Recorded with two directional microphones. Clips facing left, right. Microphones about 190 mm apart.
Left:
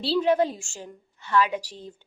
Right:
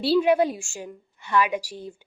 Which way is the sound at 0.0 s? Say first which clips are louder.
Right 3 dB; 10° right (ahead or behind).